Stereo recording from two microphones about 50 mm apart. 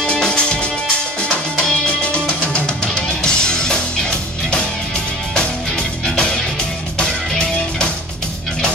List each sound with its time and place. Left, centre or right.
0.0 s music: centre
2.0 s music: left
6.0 s music: centre